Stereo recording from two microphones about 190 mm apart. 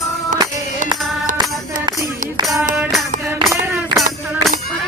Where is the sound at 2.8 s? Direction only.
Centre (ahead or behind).